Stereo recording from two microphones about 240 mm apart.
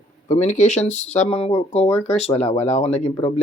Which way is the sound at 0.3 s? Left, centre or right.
Left.